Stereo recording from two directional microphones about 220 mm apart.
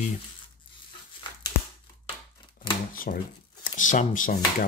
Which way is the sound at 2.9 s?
40° left (ahead or behind).